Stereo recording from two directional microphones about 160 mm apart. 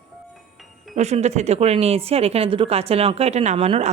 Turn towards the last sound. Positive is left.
turn(degrees=-40)  # may be behind; listen again after turning